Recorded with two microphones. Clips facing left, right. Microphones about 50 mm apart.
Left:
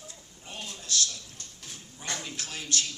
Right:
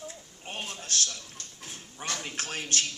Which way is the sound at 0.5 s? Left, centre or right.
Right.